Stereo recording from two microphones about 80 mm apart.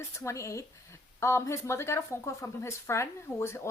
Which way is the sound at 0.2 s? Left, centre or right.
Left.